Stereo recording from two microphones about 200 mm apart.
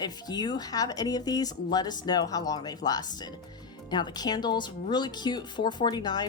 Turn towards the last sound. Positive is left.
turn(degrees=20)  # may be behind; listen again after turning